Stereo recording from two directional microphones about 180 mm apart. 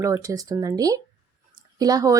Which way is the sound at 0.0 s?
15° right (ahead or behind).